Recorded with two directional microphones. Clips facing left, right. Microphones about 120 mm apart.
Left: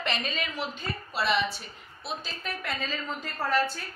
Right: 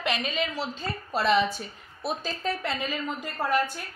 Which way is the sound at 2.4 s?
30° right (ahead or behind).